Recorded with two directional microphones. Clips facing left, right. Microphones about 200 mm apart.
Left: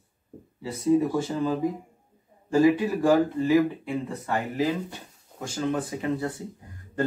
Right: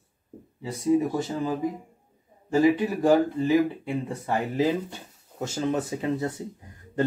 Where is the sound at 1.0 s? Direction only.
20° right (ahead or behind).